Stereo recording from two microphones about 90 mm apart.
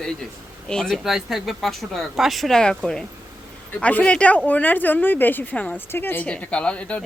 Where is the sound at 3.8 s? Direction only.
15° left (ahead or behind).